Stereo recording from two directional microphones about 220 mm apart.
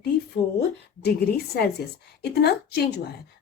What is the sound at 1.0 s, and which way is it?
A woman's voice, 45° left (ahead or behind).